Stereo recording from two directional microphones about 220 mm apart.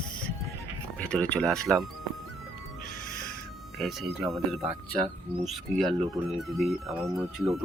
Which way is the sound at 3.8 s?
Centre (ahead or behind).